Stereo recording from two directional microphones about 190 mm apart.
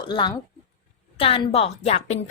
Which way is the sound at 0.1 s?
25° left (ahead or behind).